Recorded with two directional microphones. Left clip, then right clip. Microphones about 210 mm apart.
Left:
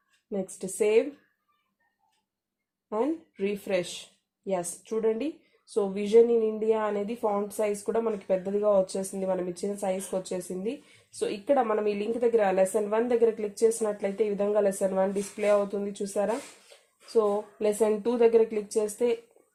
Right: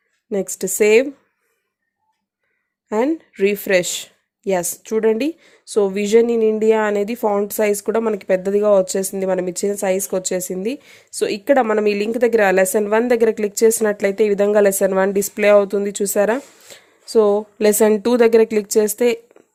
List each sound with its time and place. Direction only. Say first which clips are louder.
0.3 s speech: right 12 dB; 45° right (ahead or behind)
2.9 s speech: right 10 dB; 45° right (ahead or behind)